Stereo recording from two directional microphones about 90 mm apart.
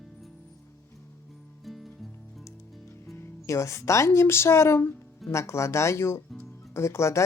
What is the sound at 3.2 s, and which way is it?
Speech, 35° left (ahead or behind).